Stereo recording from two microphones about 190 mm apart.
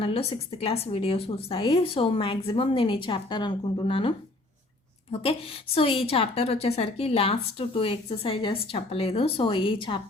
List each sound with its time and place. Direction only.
0.0 s a woman's voice: 30° left (ahead or behind)
5.2 s a woman's voice: 30° left (ahead or behind)